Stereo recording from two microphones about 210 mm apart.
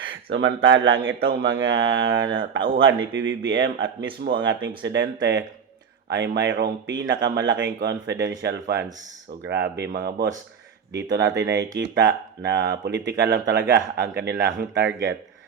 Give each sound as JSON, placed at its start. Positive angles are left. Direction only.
{"t": 0.0, "sound": "speech", "side_deg": -60}
{"t": 1.2, "sound": "speech", "side_deg": -50}
{"t": 1.7, "sound": "speech", "side_deg": -65}